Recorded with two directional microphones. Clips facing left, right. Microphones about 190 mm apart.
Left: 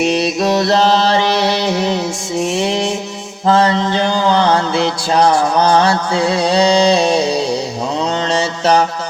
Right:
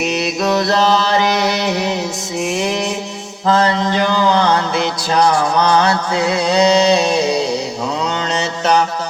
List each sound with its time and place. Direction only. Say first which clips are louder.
0.1 s mantra: left 2 dB; 30° left (ahead or behind)
5.6 s mantra: left 2 dB; 30° left (ahead or behind)
8.3 s mantra: left 2 dB; 30° left (ahead or behind)